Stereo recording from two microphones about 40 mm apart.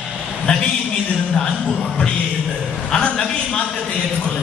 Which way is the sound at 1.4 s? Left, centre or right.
Centre.